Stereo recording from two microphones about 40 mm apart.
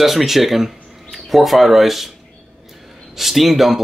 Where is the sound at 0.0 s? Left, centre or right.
Centre.